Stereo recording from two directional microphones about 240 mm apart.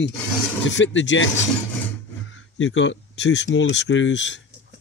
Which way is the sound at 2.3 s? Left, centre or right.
Left.